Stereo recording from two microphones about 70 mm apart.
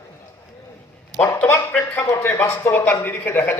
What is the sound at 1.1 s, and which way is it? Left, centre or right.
Speech, right.